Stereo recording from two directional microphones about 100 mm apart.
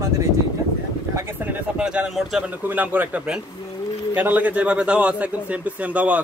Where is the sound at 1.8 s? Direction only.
10° right (ahead or behind).